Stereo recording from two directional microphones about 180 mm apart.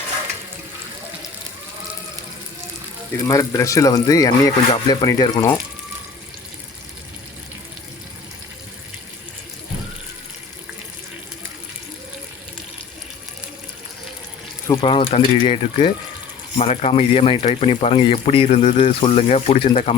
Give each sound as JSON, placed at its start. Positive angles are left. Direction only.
{"t": 3.2, "sound": "speech", "side_deg": 15}
{"t": 14.8, "sound": "speech", "side_deg": 30}